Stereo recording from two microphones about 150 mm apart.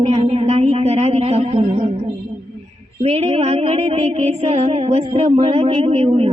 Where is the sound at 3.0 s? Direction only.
40° right (ahead or behind).